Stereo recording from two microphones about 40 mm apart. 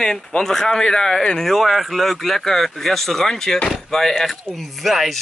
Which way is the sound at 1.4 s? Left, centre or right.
Centre.